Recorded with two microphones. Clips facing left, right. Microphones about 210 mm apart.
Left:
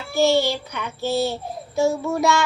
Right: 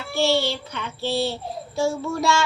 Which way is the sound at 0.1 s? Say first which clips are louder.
Left 3 dB; 15° left (ahead or behind).